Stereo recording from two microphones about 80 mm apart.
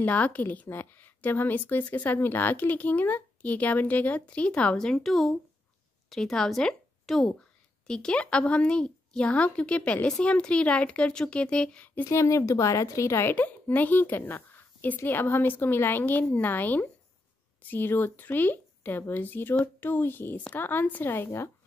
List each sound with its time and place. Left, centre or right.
0.0 s a woman's voice: centre
12.1 s a woman's voice: left
13.3 s a woman's voice: left